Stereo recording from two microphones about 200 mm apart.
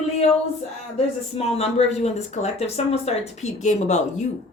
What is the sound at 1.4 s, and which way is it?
Speech, 30° left (ahead or behind).